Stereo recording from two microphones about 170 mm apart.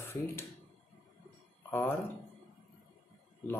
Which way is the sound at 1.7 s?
10° left (ahead or behind).